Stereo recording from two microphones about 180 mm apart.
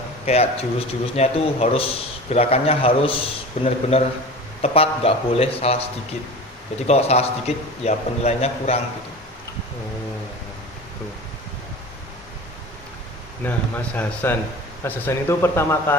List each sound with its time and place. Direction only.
0.3 s a man's voice: 35° left (ahead or behind)
6.8 s a man's voice: 35° left (ahead or behind)
13.4 s speech: 10° left (ahead or behind)